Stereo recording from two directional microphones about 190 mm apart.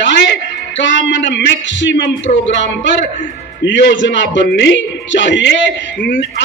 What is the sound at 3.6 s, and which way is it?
A man's voice, 65° left (ahead or behind).